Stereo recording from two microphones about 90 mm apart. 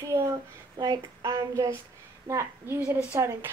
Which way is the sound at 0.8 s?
45° right (ahead or behind).